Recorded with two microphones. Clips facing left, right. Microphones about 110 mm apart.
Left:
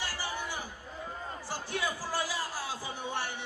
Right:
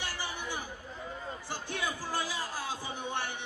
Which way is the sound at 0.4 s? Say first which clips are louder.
Even; 20° right (ahead or behind).